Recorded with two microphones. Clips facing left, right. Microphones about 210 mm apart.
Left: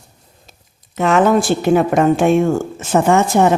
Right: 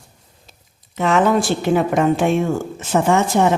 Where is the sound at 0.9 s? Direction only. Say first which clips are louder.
Left 3 dB; 50° left (ahead or behind).